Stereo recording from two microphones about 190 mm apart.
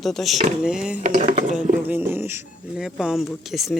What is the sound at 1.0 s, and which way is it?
Speech, 40° right (ahead or behind).